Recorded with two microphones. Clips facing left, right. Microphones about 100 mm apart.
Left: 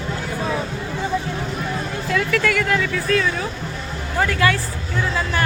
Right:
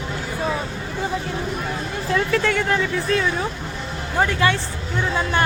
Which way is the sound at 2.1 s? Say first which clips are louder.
Even; 30° right (ahead or behind).